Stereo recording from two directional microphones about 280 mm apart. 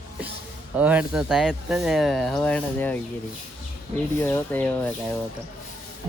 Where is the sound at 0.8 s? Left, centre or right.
Centre.